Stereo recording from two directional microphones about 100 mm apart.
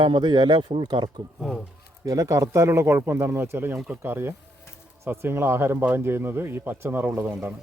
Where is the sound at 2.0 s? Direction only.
35° right (ahead or behind).